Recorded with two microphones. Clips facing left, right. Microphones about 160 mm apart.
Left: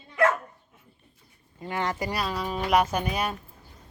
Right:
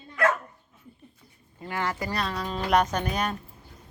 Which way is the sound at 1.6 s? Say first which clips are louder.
Left 1 dB; 20° left (ahead or behind).